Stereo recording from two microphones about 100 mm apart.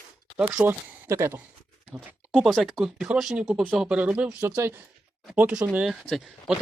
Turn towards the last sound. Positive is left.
turn(degrees=0)  # may be behind; listen again after turning